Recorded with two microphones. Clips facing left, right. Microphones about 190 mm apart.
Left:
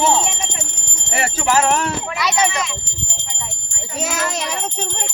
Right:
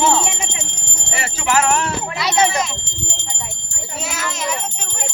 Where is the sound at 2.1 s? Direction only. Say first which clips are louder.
Right 3 dB; 25° right (ahead or behind).